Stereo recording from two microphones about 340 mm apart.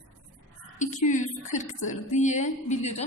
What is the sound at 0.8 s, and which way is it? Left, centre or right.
A woman's voice, left.